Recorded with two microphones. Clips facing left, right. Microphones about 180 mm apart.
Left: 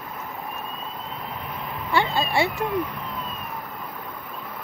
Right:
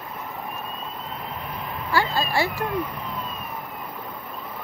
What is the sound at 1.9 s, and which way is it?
Speech, 25° left (ahead or behind).